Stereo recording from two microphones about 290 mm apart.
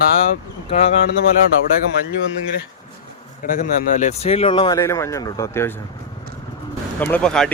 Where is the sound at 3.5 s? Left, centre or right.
Left; by 5.7 s centre.